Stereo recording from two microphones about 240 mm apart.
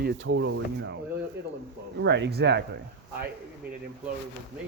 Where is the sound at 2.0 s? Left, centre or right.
Right.